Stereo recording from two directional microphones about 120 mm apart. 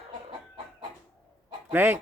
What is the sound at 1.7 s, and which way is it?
Speech, 15° right (ahead or behind).